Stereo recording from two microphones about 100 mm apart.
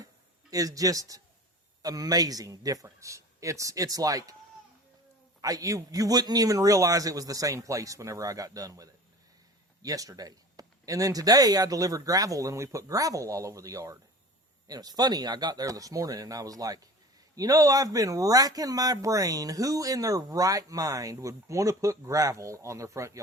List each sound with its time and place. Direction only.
0.5 s speech: 35° right (ahead or behind)
5.4 s speech: 35° right (ahead or behind)